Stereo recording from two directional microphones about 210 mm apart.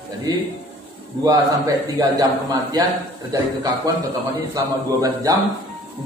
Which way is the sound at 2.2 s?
15° right (ahead or behind).